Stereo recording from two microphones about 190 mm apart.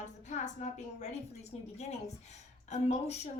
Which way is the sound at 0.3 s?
40° left (ahead or behind).